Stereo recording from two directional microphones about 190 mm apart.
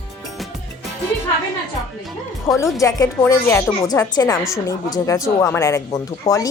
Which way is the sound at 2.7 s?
15° left (ahead or behind).